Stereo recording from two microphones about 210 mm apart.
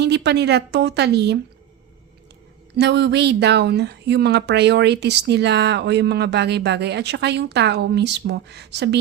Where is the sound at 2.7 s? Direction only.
55° right (ahead or behind).